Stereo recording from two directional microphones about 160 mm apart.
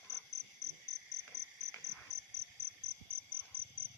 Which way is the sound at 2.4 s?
40° right (ahead or behind).